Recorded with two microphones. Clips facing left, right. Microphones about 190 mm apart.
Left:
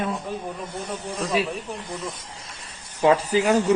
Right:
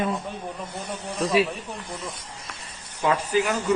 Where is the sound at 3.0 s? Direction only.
30° left (ahead or behind).